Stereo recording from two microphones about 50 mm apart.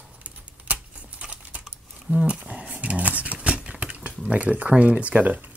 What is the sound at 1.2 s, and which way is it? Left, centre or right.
Typing, right.